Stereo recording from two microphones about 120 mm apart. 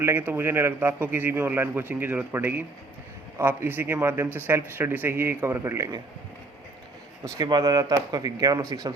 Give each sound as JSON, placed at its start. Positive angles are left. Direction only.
{"t": 0.0, "sound": "a man's voice", "side_deg": -15}
{"t": 7.3, "sound": "speech", "side_deg": -35}